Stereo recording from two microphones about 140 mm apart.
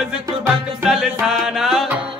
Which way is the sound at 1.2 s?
Centre (ahead or behind).